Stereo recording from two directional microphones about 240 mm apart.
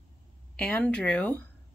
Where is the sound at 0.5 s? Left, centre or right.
Centre.